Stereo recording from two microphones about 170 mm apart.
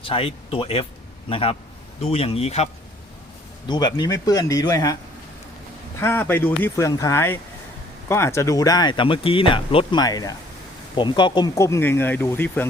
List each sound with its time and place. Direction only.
0.0 s speech: 30° left (ahead or behind)
3.7 s speech: 25° left (ahead or behind)
6.0 s speech: 15° left (ahead or behind)